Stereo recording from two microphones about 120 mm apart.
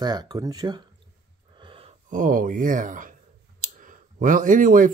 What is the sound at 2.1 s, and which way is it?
Speech, 90° right.